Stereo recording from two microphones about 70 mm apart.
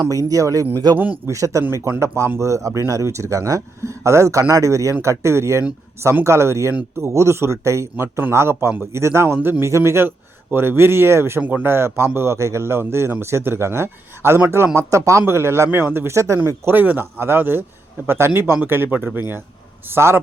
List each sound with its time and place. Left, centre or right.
0.0 s speech: right
15.3 s speech: right
16.1 s speech: right
16.7 s speech: right
19.9 s speech: right